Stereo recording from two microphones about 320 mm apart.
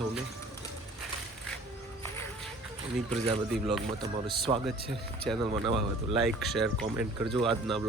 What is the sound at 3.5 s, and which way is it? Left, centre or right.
Speech, centre.